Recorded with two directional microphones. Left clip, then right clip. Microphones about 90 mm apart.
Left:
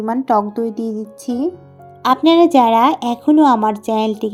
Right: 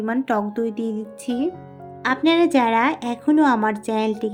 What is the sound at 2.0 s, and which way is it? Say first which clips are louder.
A woman's voice: left 7 dB; 45° left (ahead or behind).